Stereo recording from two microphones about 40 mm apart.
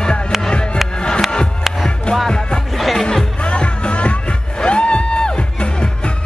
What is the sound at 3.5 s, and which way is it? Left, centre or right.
Music, left.